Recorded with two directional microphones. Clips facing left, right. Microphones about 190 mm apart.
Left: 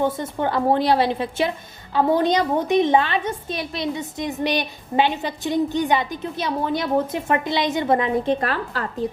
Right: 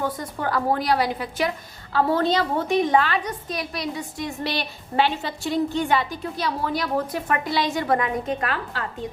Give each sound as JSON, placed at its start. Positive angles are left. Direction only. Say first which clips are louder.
{"t": 0.0, "sound": "a woman's voice", "louder": "left 5 dB", "side_deg": 25}